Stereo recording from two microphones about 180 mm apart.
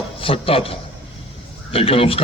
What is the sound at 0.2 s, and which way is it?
A man's voice, 30° left (ahead or behind).